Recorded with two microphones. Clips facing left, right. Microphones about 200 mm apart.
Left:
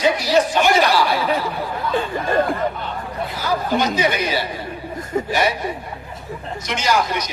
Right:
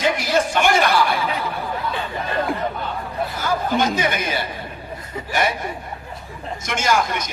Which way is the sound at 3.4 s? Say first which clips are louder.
Left 1 dB; 50° right (ahead or behind).